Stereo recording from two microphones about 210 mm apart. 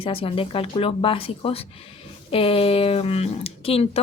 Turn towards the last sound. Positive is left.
turn(degrees=30)  # may be behind; listen again after turning